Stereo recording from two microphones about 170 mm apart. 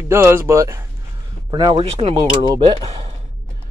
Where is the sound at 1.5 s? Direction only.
25° right (ahead or behind).